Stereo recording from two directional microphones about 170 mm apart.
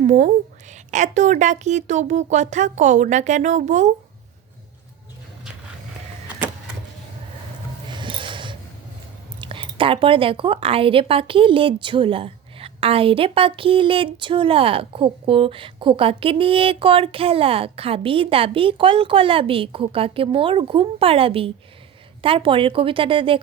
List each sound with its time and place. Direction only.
0.0 s a woman's voice: 45° right (ahead or behind)
7.9 s a sound: 30° right (ahead or behind)
9.4 s a woman's voice: 30° right (ahead or behind)